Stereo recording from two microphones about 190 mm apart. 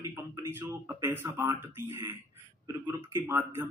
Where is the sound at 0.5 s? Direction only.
10° right (ahead or behind).